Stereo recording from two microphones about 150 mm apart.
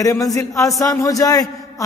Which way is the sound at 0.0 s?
20° left (ahead or behind).